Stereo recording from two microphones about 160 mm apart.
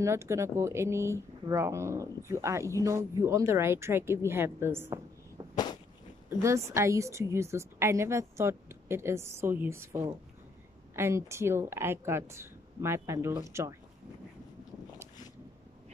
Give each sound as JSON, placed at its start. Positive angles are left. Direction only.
{"t": 0.0, "sound": "a woman's voice", "side_deg": -15}
{"t": 6.4, "sound": "a woman's voice", "side_deg": -20}